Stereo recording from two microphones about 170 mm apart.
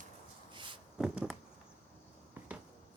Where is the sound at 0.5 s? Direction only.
30° right (ahead or behind).